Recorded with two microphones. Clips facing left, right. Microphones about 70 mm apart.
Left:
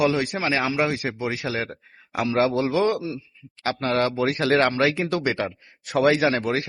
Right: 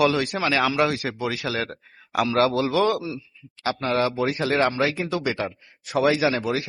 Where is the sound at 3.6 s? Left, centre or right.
Left.